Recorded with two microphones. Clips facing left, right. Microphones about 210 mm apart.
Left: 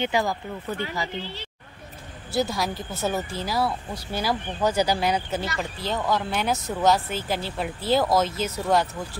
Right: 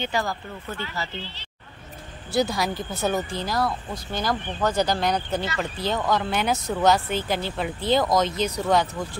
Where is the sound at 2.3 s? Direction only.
Centre (ahead or behind).